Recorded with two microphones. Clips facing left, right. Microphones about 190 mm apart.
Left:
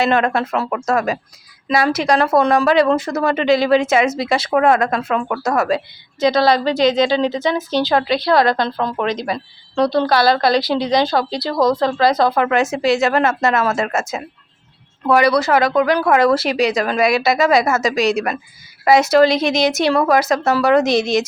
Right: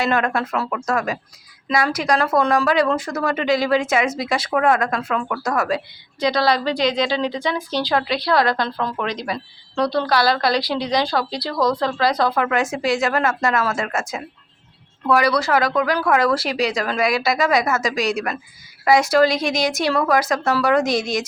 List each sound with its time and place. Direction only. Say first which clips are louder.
0.0 s speech: left 4 dB; 25° left (ahead or behind)